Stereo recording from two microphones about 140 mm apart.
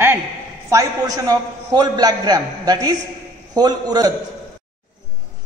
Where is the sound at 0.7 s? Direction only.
25° right (ahead or behind).